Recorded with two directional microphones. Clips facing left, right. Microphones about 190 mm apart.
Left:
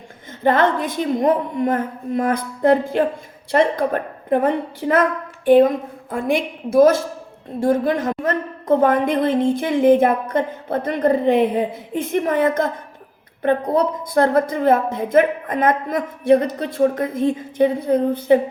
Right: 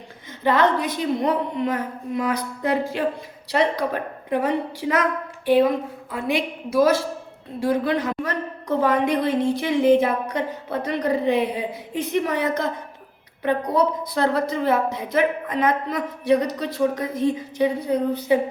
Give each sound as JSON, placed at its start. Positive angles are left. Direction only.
{"t": 0.4, "sound": "a woman's voice", "side_deg": 50}